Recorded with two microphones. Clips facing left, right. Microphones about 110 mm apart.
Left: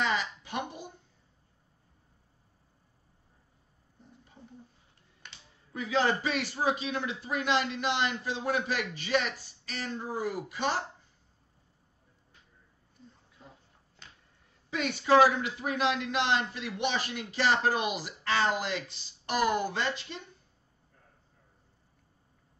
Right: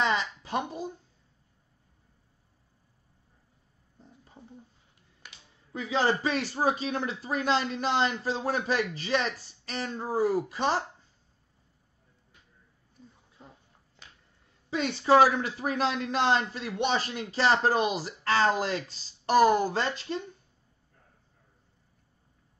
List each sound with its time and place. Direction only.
0.0 s a sound: 35° right (ahead or behind)
5.2 s finger snapping: 5° right (ahead or behind)
5.7 s a man's voice: 30° right (ahead or behind)
14.7 s a man's voice: 30° right (ahead or behind)